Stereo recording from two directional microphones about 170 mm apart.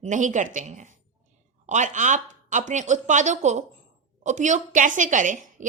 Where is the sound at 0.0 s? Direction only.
45° right (ahead or behind).